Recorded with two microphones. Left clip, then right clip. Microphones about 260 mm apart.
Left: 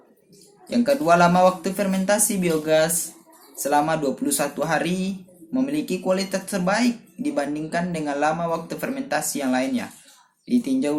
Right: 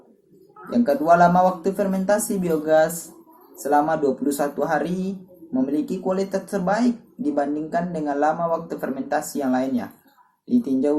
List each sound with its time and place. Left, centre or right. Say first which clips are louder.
0.7 s speech: right 1 dB; left